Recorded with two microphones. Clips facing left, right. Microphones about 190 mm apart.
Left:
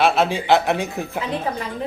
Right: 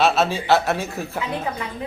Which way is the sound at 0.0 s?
15° left (ahead or behind).